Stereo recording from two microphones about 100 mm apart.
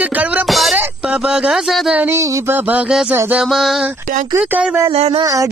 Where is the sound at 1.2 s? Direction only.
5° right (ahead or behind).